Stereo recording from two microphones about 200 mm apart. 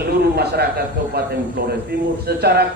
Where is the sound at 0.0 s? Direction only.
50° right (ahead or behind).